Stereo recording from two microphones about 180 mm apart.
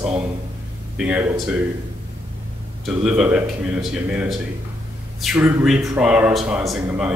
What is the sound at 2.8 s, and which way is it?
A man's voice, 5° right (ahead or behind).